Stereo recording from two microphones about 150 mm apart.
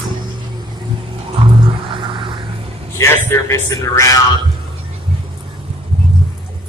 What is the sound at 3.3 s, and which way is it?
Speech, 20° left (ahead or behind).